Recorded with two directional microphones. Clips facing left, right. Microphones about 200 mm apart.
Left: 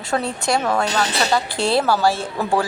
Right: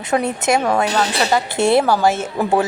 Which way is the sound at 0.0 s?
20° right (ahead or behind).